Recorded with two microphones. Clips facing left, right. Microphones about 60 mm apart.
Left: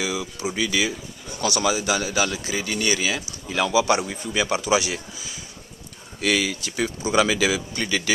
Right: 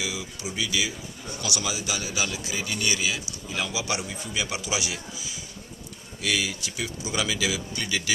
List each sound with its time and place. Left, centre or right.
0.4 s a man's voice: left
3.4 s speech: left
3.7 s a man's voice: left
4.5 s speech: left
6.2 s a man's voice: left